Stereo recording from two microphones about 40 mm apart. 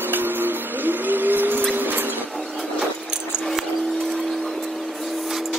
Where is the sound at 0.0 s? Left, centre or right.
Right.